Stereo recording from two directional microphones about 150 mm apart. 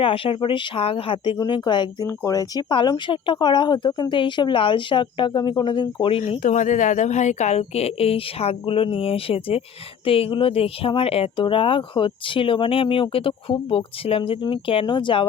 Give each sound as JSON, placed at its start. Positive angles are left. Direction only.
{"t": 0.0, "sound": "speech", "side_deg": 35}
{"t": 6.4, "sound": "speech", "side_deg": 55}